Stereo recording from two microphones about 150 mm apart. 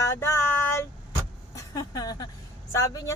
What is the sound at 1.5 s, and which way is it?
Vehicle, 20° left (ahead or behind).